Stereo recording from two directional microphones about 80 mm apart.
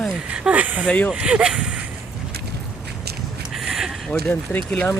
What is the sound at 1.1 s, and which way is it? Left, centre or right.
Speech, centre.